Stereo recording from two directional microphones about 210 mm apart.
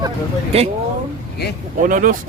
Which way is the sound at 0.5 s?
30° right (ahead or behind).